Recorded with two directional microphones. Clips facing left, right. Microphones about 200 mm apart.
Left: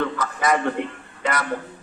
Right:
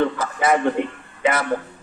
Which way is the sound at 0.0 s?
25° right (ahead or behind).